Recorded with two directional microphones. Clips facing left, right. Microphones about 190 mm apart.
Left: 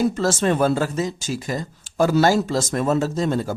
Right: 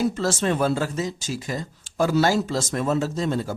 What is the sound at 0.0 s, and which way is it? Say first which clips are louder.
Speech: left 3 dB; 50° left (ahead or behind).